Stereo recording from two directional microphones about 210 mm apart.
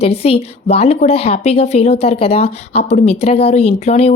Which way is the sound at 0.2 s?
30° left (ahead or behind).